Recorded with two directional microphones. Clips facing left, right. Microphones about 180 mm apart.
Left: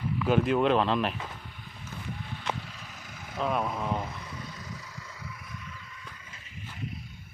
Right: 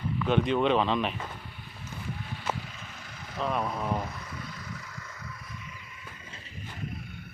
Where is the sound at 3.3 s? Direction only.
5° left (ahead or behind).